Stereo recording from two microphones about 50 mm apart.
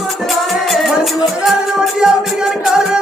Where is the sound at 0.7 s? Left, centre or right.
Centre.